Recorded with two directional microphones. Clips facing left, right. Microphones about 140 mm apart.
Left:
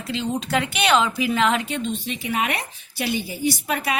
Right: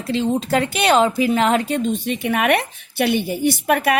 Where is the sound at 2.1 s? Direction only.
60° right (ahead or behind).